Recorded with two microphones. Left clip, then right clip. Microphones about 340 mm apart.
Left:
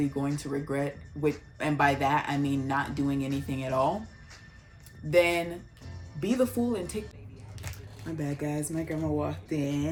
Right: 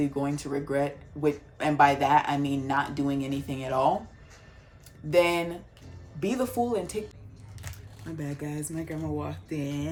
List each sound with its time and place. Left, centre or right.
0.0 s speech: centre
5.1 s speech: centre